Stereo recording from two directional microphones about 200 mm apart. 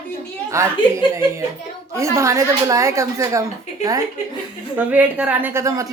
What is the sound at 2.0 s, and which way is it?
Speech, 15° right (ahead or behind).